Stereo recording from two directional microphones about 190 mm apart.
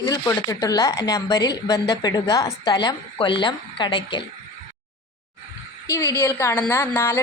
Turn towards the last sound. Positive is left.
turn(degrees=15)  # may be behind; listen again after turning